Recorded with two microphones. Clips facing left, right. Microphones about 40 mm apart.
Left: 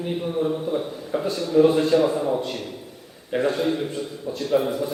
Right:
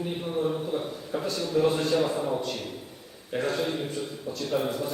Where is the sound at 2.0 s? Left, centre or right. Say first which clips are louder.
Left 5 dB; centre.